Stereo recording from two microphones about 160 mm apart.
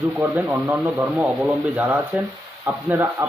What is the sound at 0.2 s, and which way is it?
Speech, 10° right (ahead or behind).